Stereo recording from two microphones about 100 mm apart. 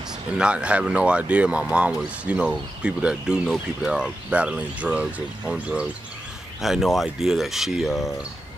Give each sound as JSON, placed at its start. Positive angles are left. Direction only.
{"t": 0.4, "sound": "speech", "side_deg": -10}